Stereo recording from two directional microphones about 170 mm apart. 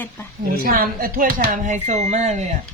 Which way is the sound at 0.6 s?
60° right (ahead or behind).